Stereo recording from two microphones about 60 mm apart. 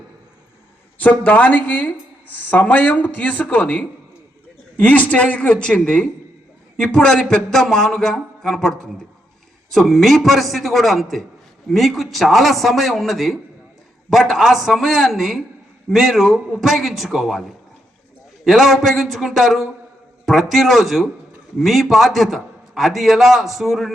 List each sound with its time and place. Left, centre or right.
0.9 s a man's voice: left; by 17.4 s centre
18.4 s a man's voice: centre